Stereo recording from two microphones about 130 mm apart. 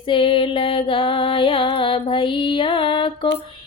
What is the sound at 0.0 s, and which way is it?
Music, 40° left (ahead or behind).